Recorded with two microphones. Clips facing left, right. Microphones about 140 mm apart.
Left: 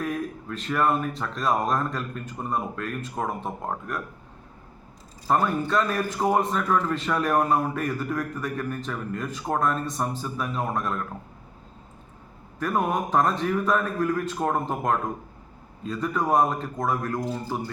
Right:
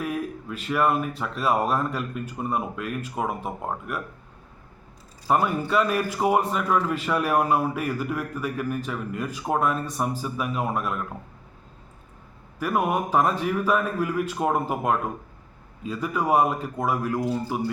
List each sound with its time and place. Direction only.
0.0 s a man's voice: 10° right (ahead or behind)
5.3 s a man's voice: 10° right (ahead or behind)
12.5 s a man's voice: 10° right (ahead or behind)